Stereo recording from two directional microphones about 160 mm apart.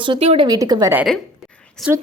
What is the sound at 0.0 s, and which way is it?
Speech, 35° right (ahead or behind).